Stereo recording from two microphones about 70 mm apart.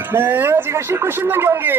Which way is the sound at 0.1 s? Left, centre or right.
Right.